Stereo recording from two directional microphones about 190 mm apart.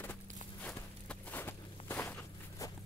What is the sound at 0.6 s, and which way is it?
Walk, 5° left (ahead or behind).